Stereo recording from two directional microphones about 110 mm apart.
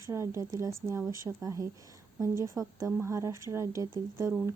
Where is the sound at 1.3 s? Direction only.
5° right (ahead or behind).